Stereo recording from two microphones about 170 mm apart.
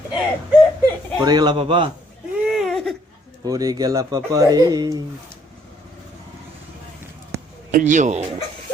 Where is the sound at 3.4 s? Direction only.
20° right (ahead or behind).